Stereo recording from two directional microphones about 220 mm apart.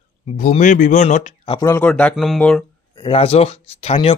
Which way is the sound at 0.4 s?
35° left (ahead or behind).